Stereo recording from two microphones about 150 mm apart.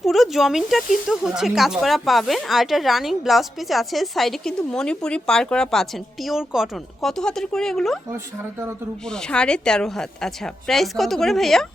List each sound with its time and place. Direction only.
0.0 s speech: centre (ahead or behind)
8.1 s speech: 15° right (ahead or behind)
9.0 s speech: 5° left (ahead or behind)